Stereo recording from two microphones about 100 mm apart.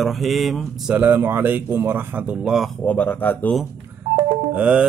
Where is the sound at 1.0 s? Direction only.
20° right (ahead or behind); by 2.8 s 5° right (ahead or behind).